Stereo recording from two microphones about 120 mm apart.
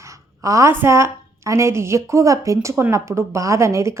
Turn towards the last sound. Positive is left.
turn(degrees=-25)  # may be behind; listen again after turning